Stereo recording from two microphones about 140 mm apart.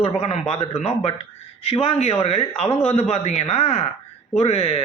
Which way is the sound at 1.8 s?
45° left (ahead or behind).